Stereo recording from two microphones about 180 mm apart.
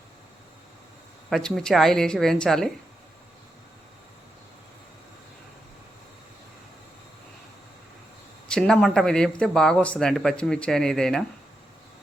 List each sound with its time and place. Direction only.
1.3 s speech: 5° left (ahead or behind)
8.4 s speech: 5° left (ahead or behind)